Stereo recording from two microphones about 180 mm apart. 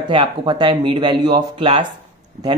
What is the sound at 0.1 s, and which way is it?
Speech, 25° right (ahead or behind).